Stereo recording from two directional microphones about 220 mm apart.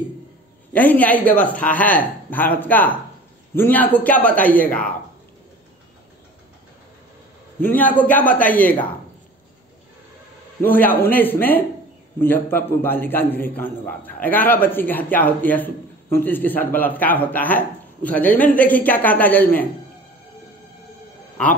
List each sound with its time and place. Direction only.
0.7 s a man's voice: 5° left (ahead or behind)
7.6 s a man's voice: 10° left (ahead or behind)
10.6 s a man's voice: 10° left (ahead or behind)